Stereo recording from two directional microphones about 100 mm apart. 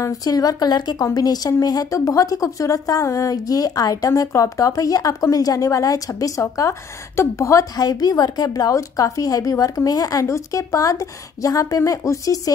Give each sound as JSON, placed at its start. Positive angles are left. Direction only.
{"t": 0.0, "sound": "a woman's voice", "side_deg": 35}